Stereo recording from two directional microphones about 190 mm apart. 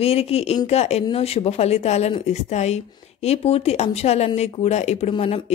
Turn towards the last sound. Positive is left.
turn(degrees=30)  # may be behind; listen again after turning